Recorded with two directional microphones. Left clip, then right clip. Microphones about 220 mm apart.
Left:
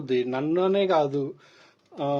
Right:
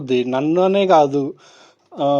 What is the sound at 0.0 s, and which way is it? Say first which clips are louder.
Speech: right 7 dB; 35° right (ahead or behind).